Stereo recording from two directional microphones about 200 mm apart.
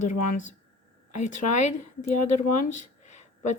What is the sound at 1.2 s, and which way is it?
Speech, 35° left (ahead or behind).